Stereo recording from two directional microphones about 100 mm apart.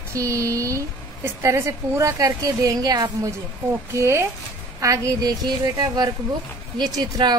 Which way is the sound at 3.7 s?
25° right (ahead or behind).